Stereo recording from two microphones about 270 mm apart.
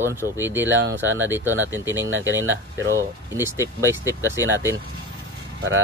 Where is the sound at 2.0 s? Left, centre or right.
Right.